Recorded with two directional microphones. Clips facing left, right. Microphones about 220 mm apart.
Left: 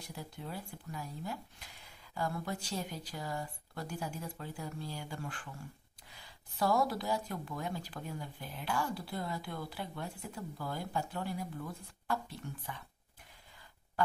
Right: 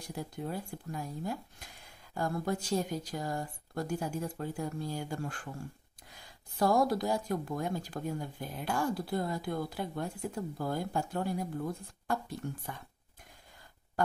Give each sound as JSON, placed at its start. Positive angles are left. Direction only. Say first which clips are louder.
{"t": 0.1, "sound": "a woman's voice", "louder": "right 7 dB", "side_deg": -45}